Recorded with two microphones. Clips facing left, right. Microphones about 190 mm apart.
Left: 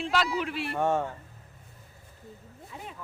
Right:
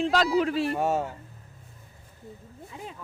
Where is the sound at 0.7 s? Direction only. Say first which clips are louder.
Even; 10° right (ahead or behind).